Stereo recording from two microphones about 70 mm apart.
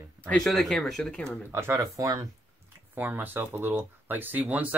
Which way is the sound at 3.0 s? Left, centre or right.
Right.